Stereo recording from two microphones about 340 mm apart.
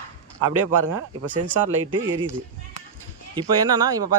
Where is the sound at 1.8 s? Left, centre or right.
Right.